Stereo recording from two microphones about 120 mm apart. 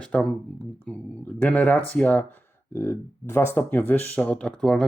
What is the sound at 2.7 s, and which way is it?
Speech, 25° left (ahead or behind).